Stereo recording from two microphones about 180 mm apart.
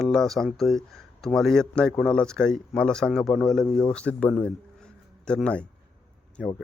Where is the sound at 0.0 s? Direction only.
Centre (ahead or behind).